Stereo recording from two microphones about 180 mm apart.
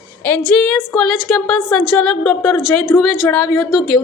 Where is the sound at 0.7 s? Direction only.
5° left (ahead or behind).